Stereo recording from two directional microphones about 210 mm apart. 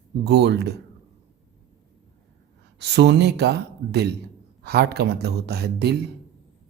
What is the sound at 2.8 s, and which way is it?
Speech, 55° right (ahead or behind).